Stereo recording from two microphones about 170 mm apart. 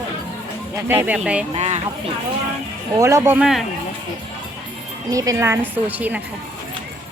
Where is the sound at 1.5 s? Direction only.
40° right (ahead or behind).